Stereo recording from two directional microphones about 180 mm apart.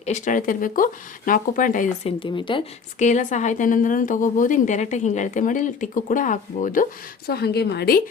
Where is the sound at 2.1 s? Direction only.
25° left (ahead or behind).